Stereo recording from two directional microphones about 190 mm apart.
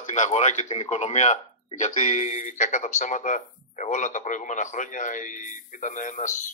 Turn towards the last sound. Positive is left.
turn(degrees=40)  # may be behind; listen again after turning